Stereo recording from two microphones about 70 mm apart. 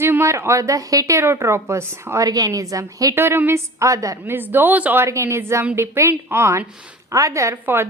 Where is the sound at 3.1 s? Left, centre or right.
Right.